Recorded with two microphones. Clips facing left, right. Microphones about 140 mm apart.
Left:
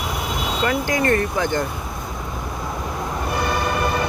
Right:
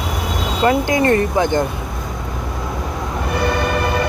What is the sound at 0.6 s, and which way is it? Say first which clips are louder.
Speech: right 6 dB; 20° right (ahead or behind).